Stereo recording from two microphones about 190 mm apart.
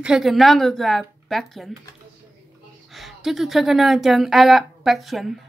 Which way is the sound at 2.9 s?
Centre (ahead or behind).